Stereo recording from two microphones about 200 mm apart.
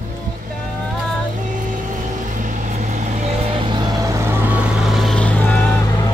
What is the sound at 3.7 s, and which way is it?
Vehicle, 20° right (ahead or behind).